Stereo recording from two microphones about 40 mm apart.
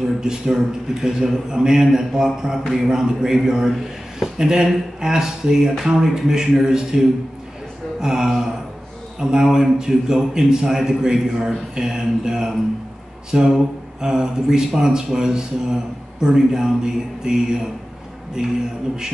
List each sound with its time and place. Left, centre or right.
0.2 s speech: centre